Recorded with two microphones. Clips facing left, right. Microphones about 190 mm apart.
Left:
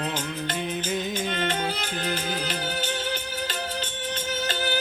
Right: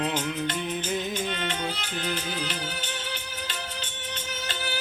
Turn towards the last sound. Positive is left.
turn(degrees=40)  # may be behind; listen again after turning